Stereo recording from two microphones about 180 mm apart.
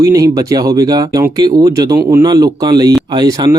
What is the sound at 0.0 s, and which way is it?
Speech, 20° right (ahead or behind).